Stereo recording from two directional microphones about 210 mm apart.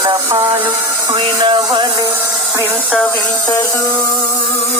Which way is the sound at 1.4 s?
20° right (ahead or behind).